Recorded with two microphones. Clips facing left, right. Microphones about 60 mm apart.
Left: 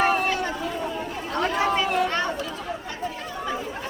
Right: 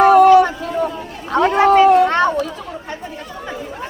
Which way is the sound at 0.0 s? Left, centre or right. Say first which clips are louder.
Right 14 dB; right.